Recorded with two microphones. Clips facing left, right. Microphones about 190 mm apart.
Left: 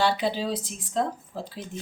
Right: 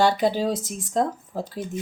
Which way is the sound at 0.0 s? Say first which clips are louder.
Right 5 dB; 45° right (ahead or behind).